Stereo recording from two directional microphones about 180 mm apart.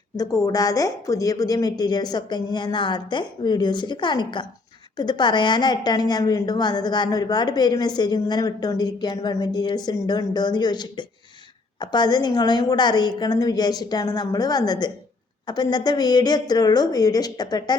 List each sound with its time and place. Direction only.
0.2 s a woman's voice: 20° left (ahead or behind)